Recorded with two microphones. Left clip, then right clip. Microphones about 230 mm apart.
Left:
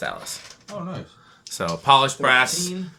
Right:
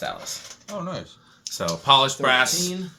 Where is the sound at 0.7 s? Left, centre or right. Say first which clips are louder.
Right 2 dB; right.